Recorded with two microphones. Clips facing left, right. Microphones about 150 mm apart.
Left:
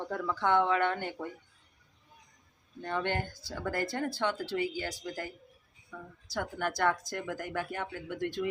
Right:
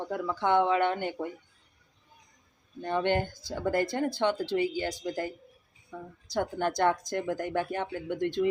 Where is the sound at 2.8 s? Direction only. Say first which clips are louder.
Right 5 dB; 20° right (ahead or behind).